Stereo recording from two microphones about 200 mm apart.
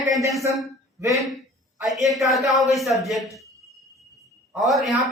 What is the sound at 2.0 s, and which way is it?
A man's voice, centre (ahead or behind).